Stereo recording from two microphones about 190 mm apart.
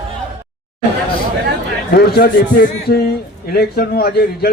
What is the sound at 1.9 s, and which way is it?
A man's voice, 55° left (ahead or behind).